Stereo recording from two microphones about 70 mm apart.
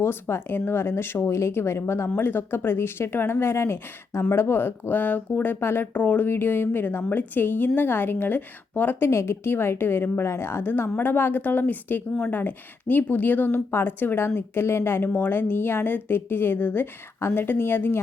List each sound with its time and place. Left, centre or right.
0.0 s a woman's voice: left
9.0 s speech: left